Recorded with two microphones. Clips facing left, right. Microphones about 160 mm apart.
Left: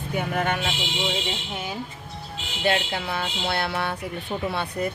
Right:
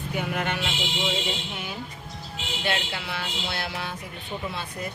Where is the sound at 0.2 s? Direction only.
45° left (ahead or behind).